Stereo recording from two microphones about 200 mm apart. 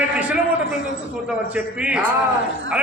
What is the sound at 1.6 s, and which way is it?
Speech, 5° right (ahead or behind).